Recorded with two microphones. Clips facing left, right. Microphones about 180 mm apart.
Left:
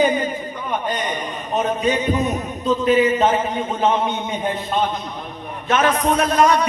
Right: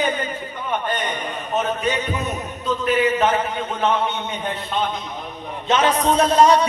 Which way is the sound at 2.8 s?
20° left (ahead or behind).